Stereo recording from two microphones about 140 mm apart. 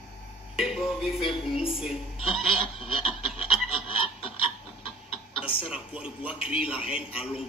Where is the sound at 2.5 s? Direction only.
40° left (ahead or behind).